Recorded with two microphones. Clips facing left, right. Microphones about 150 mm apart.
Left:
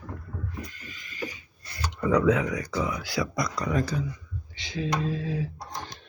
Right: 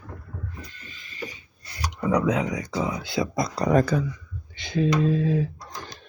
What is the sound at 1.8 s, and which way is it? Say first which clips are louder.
Speech: left 1 dB; 15° right (ahead or behind).